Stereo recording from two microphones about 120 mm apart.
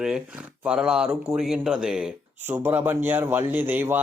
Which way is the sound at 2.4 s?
20° right (ahead or behind).